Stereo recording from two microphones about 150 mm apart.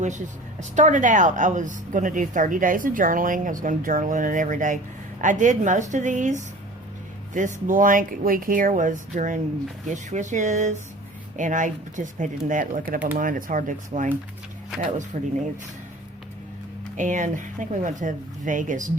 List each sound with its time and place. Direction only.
0.8 s a woman's voice: 55° right (ahead or behind)
15.1 s speech: 55° right (ahead or behind)
17.0 s a woman's voice: 55° right (ahead or behind)